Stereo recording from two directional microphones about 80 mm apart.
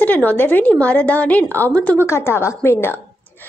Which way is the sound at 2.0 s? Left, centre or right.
Left.